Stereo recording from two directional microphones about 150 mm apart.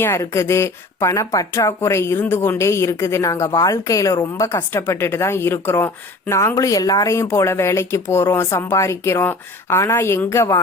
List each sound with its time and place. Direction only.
0.0 s speech: 20° left (ahead or behind)